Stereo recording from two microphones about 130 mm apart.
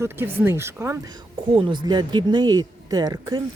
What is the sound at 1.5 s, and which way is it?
Speech, 40° right (ahead or behind).